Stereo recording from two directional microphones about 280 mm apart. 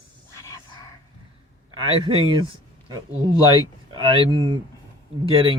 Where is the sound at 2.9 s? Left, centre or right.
Centre.